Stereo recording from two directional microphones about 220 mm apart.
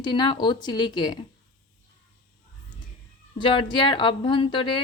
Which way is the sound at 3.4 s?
20° left (ahead or behind).